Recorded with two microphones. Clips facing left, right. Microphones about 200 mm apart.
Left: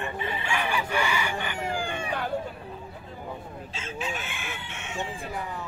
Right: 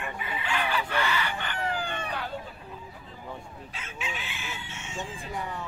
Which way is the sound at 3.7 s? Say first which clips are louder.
Left 7 dB; 25° left (ahead or behind).